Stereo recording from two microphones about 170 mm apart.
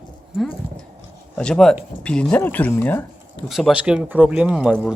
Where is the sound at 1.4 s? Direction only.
5° left (ahead or behind).